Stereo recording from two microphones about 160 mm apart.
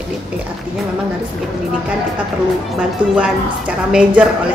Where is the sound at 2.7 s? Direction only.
5° right (ahead or behind).